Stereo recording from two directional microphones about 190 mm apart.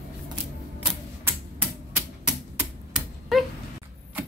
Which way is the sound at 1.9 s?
10° right (ahead or behind).